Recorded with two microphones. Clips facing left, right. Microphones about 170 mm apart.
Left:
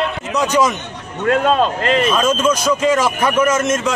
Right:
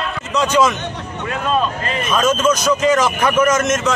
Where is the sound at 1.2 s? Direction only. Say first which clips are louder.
Left 5 dB; 85° left.